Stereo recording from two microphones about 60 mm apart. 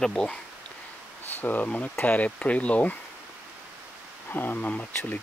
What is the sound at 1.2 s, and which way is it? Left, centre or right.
Speech, left.